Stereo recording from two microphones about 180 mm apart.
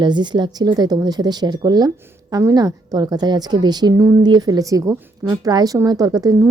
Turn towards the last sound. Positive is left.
turn(degrees=-20)  # may be behind; listen again after turning